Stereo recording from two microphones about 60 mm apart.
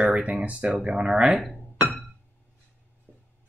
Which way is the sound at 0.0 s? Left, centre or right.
Right.